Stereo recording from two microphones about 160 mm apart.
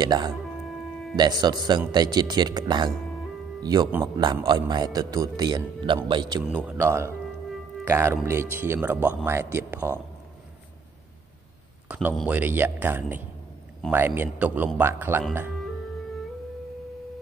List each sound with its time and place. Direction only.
0.0 s a man's voice: 25° right (ahead or behind)
11.9 s speech: 10° right (ahead or behind)